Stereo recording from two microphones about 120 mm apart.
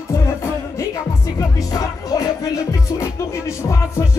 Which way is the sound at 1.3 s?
30° left (ahead or behind).